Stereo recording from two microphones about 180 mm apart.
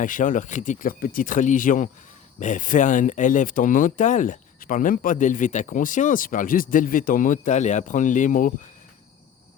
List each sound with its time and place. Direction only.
0.0 s speech: 45° left (ahead or behind)